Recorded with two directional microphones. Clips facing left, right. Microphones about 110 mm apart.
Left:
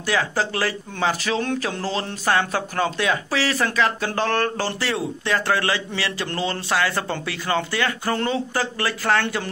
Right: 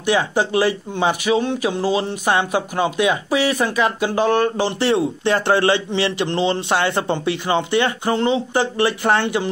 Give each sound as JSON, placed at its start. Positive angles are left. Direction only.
{"t": 0.0, "sound": "speech", "side_deg": -20}